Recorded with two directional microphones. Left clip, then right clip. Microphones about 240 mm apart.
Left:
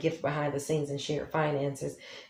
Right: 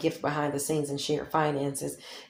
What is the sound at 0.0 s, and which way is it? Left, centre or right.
Speech, right.